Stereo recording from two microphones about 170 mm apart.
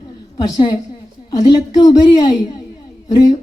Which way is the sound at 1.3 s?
25° left (ahead or behind).